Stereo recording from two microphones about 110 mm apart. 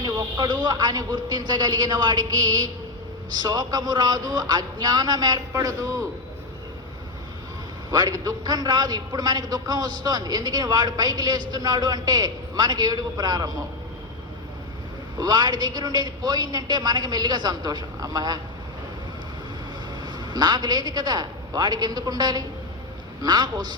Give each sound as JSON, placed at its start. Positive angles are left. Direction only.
{"t": 0.0, "sound": "a man's voice", "side_deg": -35}
{"t": 7.9, "sound": "a man's voice", "side_deg": -35}
{"t": 15.2, "sound": "a man's voice", "side_deg": -40}
{"t": 20.0, "sound": "a man's voice", "side_deg": -40}